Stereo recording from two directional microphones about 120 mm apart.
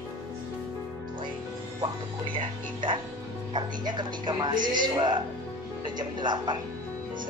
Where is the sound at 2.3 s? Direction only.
45° right (ahead or behind).